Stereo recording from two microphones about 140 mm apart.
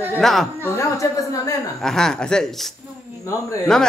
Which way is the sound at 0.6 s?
20° left (ahead or behind).